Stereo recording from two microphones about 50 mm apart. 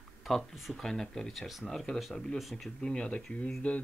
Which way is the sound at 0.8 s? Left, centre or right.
Centre.